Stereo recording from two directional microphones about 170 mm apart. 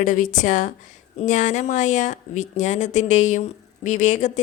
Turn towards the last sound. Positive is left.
turn(degrees=45)  # may be behind; listen again after turning